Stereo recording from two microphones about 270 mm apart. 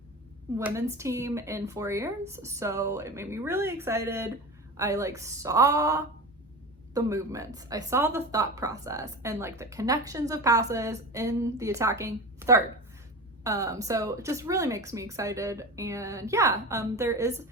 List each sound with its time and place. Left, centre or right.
0.6 s a woman's voice: centre